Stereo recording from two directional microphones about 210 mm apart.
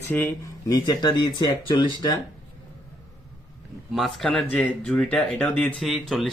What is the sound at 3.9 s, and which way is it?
Speech, centre (ahead or behind).